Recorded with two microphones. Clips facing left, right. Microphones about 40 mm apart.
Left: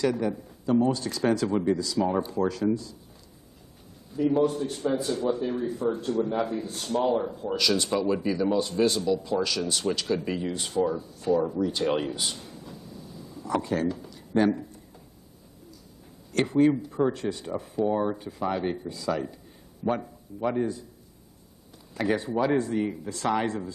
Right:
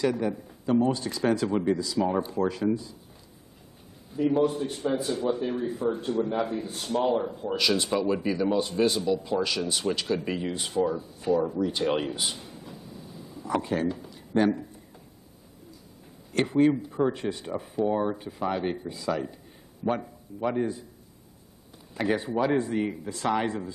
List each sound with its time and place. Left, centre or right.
0.0 s a man's voice: centre
4.1 s a man's voice: centre
11.6 s a sound: centre
14.3 s a man's voice: centre
16.3 s a man's voice: centre
21.9 s a man's voice: centre
22.7 s a man's voice: centre